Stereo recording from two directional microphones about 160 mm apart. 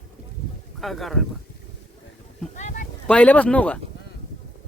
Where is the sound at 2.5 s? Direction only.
50° left (ahead or behind).